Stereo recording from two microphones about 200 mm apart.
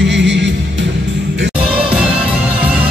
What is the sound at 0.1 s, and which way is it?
Music, 60° right (ahead or behind).